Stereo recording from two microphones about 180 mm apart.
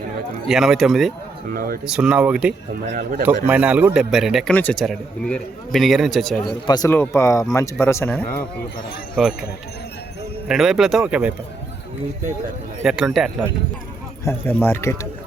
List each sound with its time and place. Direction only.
0.4 s a man's voice: centre (ahead or behind)
1.5 s a man's voice: 55° right (ahead or behind)
1.8 s a man's voice: 5° right (ahead or behind)
2.9 s a man's voice: 55° right (ahead or behind)
3.4 s a man's voice: 10° right (ahead or behind)
6.4 s speech: 25° left (ahead or behind)
9.1 s a man's voice: centre (ahead or behind)
10.5 s a man's voice: centre (ahead or behind)
12.8 s a man's voice: 5° right (ahead or behind)
14.3 s speech: 10° left (ahead or behind)